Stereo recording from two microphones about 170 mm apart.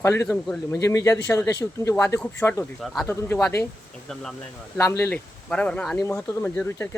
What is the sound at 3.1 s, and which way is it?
Speech, 15° left (ahead or behind).